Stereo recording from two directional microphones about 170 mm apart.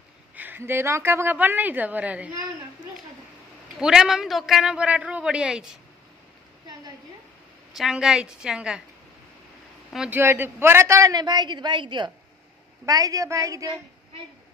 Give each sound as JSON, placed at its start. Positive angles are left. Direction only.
{"t": 0.4, "sound": "a woman's voice", "side_deg": -10}
{"t": 3.8, "sound": "a man's voice", "side_deg": -5}
{"t": 7.7, "sound": "a man's voice", "side_deg": 0}
{"t": 9.9, "sound": "a man's voice", "side_deg": -10}